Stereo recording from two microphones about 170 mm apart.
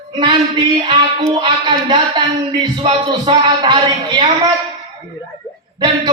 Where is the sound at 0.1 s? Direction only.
25° right (ahead or behind).